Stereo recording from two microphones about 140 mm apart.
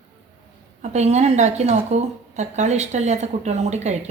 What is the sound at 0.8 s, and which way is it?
A woman's voice, 55° right (ahead or behind).